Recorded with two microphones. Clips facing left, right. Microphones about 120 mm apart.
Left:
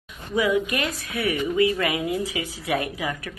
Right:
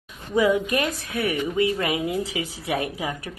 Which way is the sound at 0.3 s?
35° right (ahead or behind).